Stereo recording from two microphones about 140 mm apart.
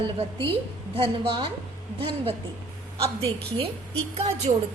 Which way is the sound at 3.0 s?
40° right (ahead or behind).